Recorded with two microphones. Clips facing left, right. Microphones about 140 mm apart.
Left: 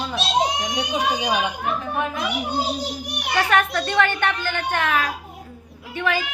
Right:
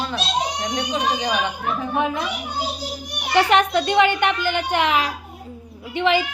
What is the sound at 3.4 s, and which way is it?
A woman's voice, 20° right (ahead or behind).